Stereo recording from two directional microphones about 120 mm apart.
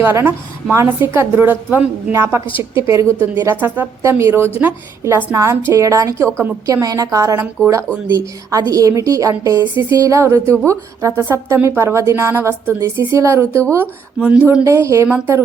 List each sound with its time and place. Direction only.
0.0 s a woman's voice: 20° right (ahead or behind)
2.7 s a woman's voice: 25° right (ahead or behind)
14.2 s a woman's voice: 10° right (ahead or behind)
14.6 s a woman's voice: 25° right (ahead or behind)